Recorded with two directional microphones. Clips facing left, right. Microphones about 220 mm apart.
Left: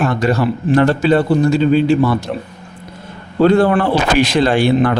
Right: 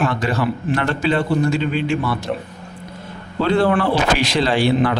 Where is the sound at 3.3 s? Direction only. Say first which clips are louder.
Left 5 dB; 45° left (ahead or behind).